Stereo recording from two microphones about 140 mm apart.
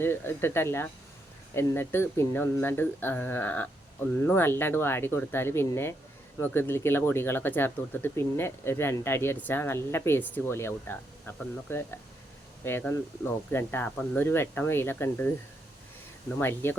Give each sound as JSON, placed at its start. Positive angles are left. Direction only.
{"t": 0.0, "sound": "speech", "side_deg": 15}
{"t": 16.4, "sound": "speech", "side_deg": 15}